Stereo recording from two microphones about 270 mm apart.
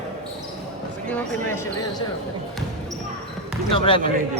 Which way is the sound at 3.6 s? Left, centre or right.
Centre.